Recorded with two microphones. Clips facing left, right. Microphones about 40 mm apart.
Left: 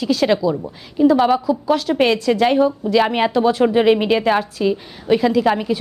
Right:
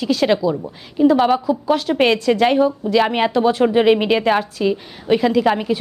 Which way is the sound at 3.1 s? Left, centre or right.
Centre.